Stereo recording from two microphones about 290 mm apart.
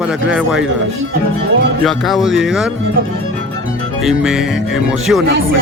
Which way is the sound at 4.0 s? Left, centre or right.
Centre.